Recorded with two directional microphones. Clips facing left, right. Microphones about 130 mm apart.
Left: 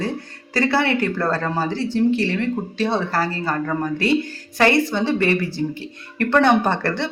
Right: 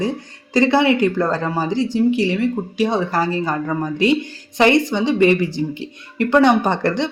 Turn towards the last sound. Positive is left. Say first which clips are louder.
# right 2 dB
turn(degrees=-15)  # may be behind; listen again after turning